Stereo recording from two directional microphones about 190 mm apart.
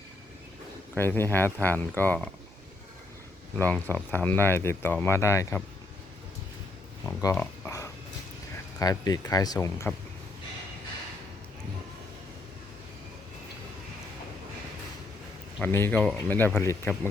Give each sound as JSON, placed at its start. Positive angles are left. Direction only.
{"t": 0.9, "sound": "speech", "side_deg": 10}
{"t": 3.6, "sound": "speech", "side_deg": 10}
{"t": 7.0, "sound": "speech", "side_deg": 15}
{"t": 15.6, "sound": "speech", "side_deg": 10}